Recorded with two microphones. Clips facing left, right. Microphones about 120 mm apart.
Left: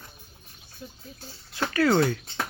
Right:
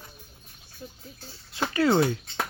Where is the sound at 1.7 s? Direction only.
20° right (ahead or behind).